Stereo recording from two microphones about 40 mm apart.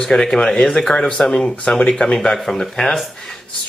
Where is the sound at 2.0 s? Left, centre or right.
Centre.